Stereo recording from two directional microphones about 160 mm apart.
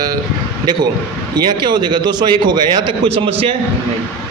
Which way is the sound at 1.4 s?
25° right (ahead or behind).